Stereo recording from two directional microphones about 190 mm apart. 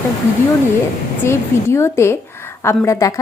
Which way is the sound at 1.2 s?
15° left (ahead or behind).